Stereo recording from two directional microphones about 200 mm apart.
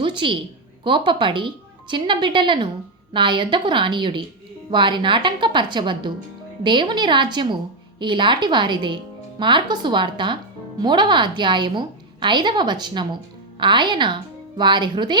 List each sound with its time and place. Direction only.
0.0 s a woman's voice: 25° right (ahead or behind)